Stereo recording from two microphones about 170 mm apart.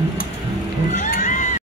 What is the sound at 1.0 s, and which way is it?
Cat, 50° left (ahead or behind).